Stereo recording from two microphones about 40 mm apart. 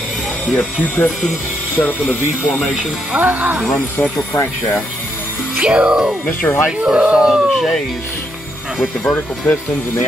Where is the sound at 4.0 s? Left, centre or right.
Left.